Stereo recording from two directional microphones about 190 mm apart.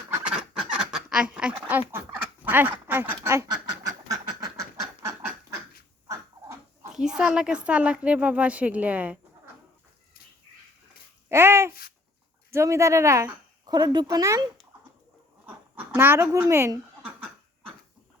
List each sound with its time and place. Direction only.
0.1 s fowl: 5° right (ahead or behind)
0.9 s speech: 5° right (ahead or behind)
1.9 s fowl: 10° right (ahead or behind)
2.8 s duck: 10° right (ahead or behind)
6.9 s a woman's voice: 5° right (ahead or behind)
11.3 s babbling: 15° right (ahead or behind)
12.5 s a woman's voice: 15° right (ahead or behind)
15.4 s a sound: 10° right (ahead or behind)